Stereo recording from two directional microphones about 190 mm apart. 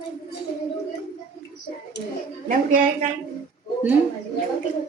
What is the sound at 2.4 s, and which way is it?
Speech, 45° right (ahead or behind).